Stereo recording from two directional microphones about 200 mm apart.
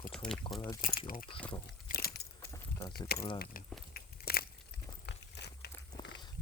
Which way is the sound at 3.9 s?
50° left (ahead or behind).